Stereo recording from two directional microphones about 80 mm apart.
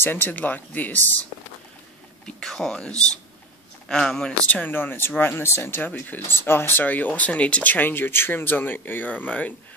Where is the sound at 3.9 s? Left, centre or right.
Centre.